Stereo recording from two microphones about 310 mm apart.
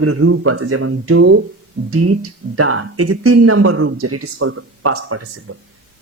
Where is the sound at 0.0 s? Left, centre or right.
Right.